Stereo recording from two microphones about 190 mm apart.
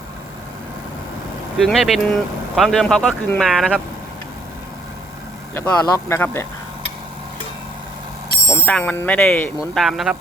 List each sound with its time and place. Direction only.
1.5 s speech: centre (ahead or behind)
5.5 s speech: 15° left (ahead or behind)
8.4 s speech: 10° left (ahead or behind)